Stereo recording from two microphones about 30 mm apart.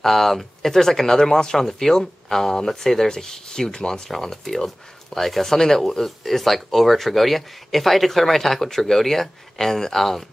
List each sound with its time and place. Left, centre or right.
0.0 s speech: centre
1.7 s speech: centre
4.2 s speech: centre